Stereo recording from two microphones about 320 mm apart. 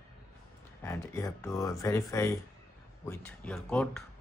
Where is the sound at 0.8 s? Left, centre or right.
Centre.